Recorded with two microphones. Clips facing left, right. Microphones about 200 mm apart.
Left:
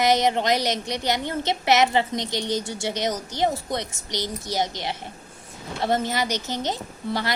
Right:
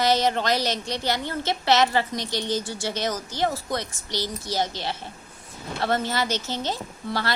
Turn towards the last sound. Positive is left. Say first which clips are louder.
# left 1 dB
turn(degrees=20)  # may be behind; listen again after turning